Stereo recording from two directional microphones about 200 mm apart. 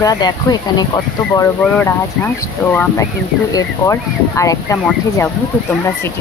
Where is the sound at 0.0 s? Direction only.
20° left (ahead or behind).